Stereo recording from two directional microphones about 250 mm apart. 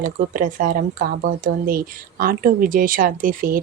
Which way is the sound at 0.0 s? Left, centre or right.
Right.